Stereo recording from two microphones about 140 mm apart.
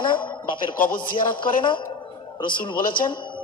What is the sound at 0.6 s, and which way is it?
Speech, 85° left.